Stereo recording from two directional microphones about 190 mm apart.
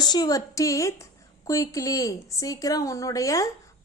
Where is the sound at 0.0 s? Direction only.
20° left (ahead or behind).